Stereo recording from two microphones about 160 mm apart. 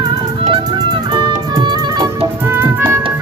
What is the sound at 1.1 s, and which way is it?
Music, 25° right (ahead or behind).